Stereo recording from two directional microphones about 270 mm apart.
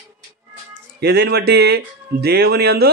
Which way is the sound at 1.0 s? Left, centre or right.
Right.